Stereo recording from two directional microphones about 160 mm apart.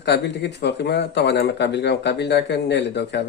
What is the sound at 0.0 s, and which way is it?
Speech, 90° left.